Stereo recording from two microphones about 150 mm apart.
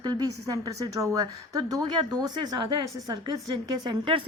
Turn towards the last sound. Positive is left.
turn(degrees=-30)  # may be behind; listen again after turning